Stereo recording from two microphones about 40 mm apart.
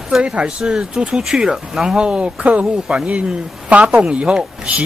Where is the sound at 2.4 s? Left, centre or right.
Right.